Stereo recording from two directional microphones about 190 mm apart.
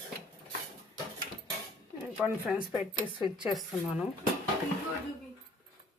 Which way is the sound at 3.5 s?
Centre (ahead or behind).